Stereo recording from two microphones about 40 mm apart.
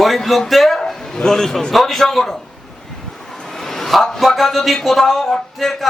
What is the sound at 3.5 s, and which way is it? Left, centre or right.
A man's voice, centre.